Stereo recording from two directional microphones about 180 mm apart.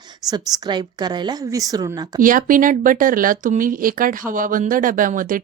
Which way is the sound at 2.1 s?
50° right (ahead or behind).